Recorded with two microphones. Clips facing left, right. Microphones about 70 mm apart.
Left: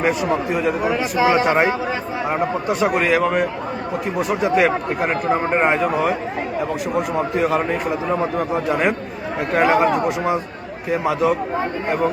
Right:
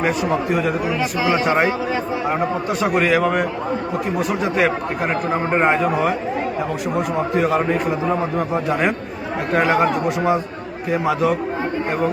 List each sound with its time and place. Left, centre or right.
0.0 s a man's voice: centre
0.9 s speech: left
1.3 s a man's voice: centre
3.0 s a man's voice: centre
7.3 s a man's voice: centre